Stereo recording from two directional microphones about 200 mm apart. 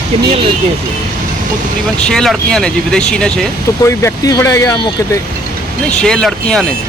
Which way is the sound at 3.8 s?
15° left (ahead or behind).